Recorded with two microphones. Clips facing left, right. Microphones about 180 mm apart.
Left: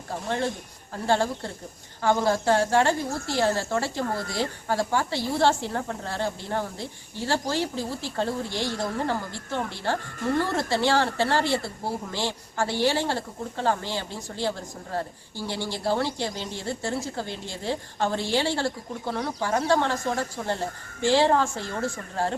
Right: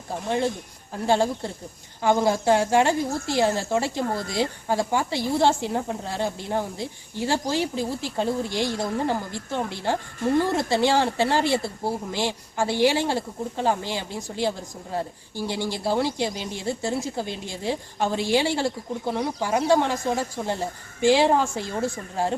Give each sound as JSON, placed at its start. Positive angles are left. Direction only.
{"t": 1.0, "sound": "speech", "side_deg": -15}